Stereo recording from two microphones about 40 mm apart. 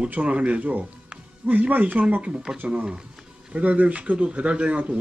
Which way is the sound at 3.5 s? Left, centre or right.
Right.